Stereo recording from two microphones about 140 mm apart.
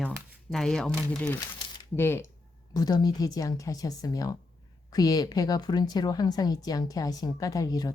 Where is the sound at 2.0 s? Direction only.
15° left (ahead or behind).